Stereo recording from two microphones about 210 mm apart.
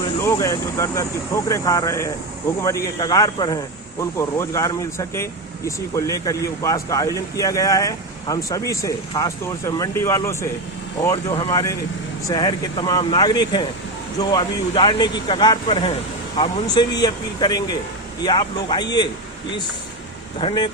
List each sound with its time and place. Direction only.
0.2 s speech: 15° left (ahead or behind)
20.4 s speech: 20° left (ahead or behind)